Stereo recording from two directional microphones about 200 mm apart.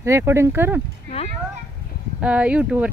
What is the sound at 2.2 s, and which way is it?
Speech, 5° right (ahead or behind).